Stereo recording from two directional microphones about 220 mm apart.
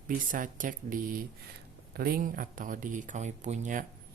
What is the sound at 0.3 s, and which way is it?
Speech, 35° right (ahead or behind).